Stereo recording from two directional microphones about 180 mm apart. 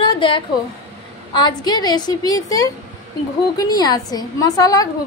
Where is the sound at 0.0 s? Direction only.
25° left (ahead or behind).